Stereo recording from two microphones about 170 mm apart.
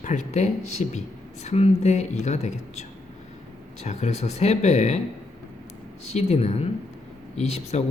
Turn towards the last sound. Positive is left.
turn(degrees=40)  # may be behind; listen again after turning